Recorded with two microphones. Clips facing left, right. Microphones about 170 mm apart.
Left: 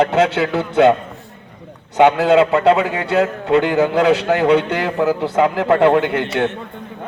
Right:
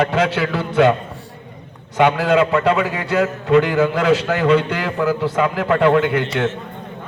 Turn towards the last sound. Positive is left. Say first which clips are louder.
# left 1 dB
turn(degrees=20)  # may be behind; listen again after turning